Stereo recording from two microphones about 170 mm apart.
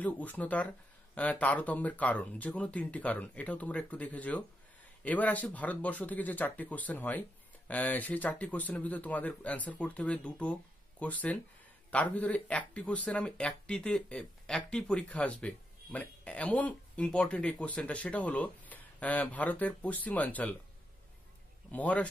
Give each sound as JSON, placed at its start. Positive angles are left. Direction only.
{"t": 0.0, "sound": "speech", "side_deg": 10}
{"t": 21.7, "sound": "speech", "side_deg": 10}